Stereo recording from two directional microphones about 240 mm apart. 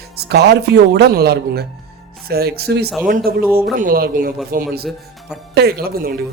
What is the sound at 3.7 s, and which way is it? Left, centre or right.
Speech, right.